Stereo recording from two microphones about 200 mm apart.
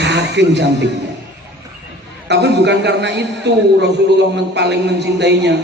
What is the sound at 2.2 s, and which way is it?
A man's voice, 60° right (ahead or behind).